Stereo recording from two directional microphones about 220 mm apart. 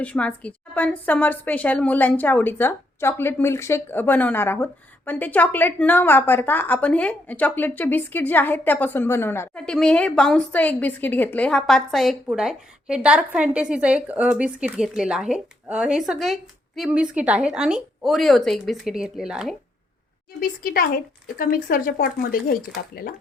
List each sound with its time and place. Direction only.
0.0 s a woman's voice: 5° left (ahead or behind)
20.4 s speech: 40° left (ahead or behind)